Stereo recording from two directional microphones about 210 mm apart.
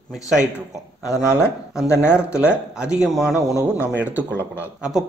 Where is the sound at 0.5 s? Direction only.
15° left (ahead or behind).